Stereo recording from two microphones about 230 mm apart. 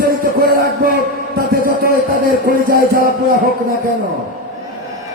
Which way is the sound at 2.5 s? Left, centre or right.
Right.